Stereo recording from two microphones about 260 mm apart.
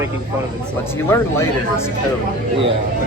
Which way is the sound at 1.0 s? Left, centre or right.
Centre.